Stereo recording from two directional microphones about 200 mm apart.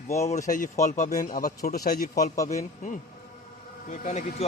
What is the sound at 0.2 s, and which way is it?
A man's voice, 35° left (ahead or behind).